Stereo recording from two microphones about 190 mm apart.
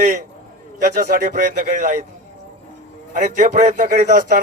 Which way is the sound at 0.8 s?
45° right (ahead or behind).